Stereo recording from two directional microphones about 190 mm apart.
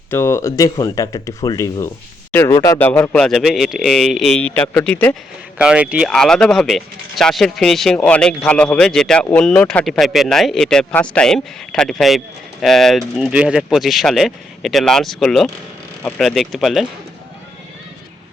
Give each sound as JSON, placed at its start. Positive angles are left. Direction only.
{"t": 0.1, "sound": "speech", "side_deg": 15}
{"t": 5.5, "sound": "speech", "side_deg": -5}